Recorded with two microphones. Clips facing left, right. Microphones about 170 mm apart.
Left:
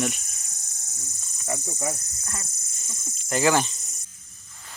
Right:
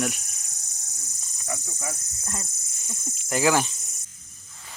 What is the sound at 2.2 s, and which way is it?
Cricket, 20° right (ahead or behind).